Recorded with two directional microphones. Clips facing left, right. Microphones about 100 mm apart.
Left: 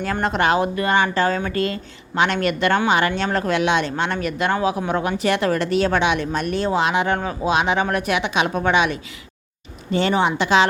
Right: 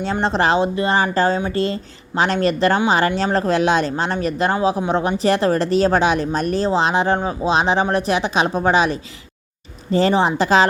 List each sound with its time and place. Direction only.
0.0 s a woman's voice: 25° right (ahead or behind)